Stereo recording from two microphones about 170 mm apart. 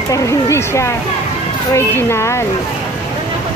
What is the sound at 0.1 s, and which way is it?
Speech, 20° left (ahead or behind).